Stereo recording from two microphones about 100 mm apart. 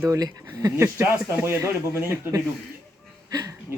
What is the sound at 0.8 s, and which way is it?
Speech, 25° right (ahead or behind).